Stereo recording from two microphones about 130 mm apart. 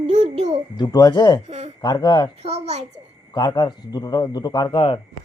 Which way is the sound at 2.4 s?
55° right (ahead or behind).